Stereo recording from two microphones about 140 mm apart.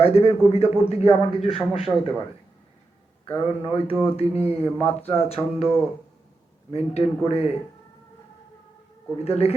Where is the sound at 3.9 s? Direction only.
15° left (ahead or behind).